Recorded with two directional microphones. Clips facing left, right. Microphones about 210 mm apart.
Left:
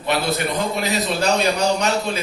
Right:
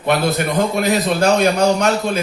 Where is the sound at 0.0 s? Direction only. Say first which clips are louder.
Right 4 dB; 50° right (ahead or behind).